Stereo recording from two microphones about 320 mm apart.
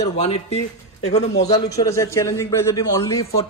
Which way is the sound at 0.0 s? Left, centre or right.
Centre.